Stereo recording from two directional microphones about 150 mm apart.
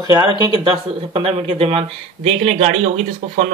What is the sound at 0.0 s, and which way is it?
Speech, 30° right (ahead or behind).